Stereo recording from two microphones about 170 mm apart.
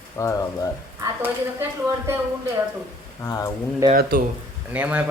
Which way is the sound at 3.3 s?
20° left (ahead or behind).